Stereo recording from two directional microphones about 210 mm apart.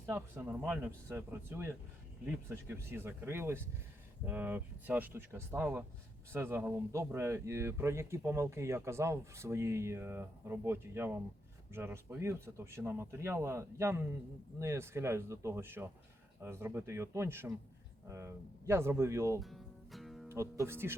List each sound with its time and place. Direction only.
0.0 s a man's voice: 10° right (ahead or behind)
19.4 s music: centre (ahead or behind)
20.2 s a man's voice: 15° right (ahead or behind)